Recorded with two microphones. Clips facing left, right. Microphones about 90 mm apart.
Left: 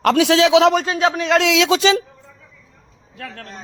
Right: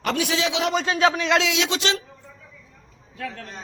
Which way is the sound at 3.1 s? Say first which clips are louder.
Right 1 dB; 60° left (ahead or behind).